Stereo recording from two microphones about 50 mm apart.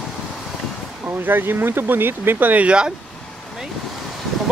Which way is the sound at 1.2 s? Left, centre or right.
Right.